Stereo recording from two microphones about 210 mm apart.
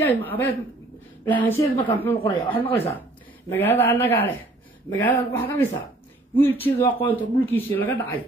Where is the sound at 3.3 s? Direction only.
10° left (ahead or behind).